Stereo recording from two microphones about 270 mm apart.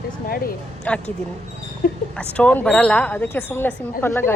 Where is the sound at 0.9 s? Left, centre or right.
Centre.